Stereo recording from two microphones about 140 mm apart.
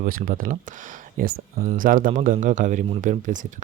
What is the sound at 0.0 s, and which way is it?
Speech, 90° right.